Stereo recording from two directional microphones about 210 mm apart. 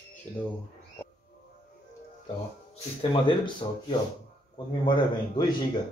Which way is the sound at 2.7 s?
25° left (ahead or behind).